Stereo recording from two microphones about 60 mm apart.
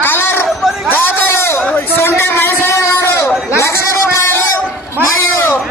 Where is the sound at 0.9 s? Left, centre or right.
Left.